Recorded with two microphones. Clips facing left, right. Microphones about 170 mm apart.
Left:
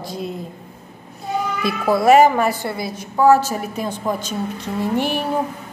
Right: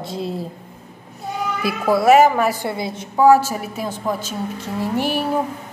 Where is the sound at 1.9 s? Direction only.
5° right (ahead or behind).